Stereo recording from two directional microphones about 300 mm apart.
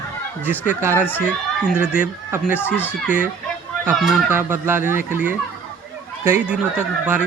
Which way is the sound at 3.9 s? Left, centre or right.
Centre.